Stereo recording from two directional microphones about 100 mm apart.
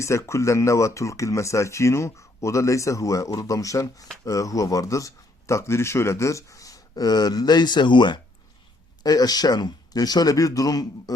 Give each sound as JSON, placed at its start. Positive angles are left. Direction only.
{"t": 0.0, "sound": "speech", "side_deg": 30}